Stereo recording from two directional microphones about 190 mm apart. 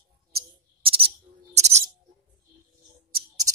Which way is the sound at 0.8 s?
30° right (ahead or behind).